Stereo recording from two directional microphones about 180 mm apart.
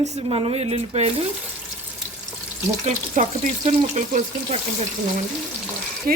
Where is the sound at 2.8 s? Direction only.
40° right (ahead or behind).